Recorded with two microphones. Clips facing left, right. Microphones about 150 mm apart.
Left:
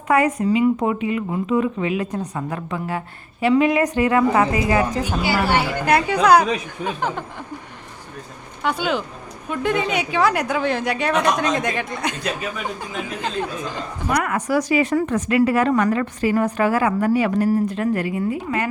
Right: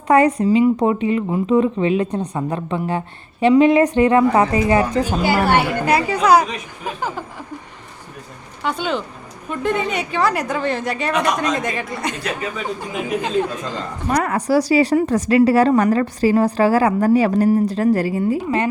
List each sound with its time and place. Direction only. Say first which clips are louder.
0.1 s speech: right 4 dB; 35° right (ahead or behind)
5.2 s speech: right 3 dB; 55° right (ahead or behind)
5.8 s a woman's voice: even; centre (ahead or behind)
8.6 s a woman's voice: even; centre (ahead or behind)
14.2 s a woman's voice: right 4 dB; 35° right (ahead or behind)